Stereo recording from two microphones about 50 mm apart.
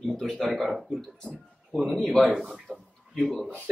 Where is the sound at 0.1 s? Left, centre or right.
Centre.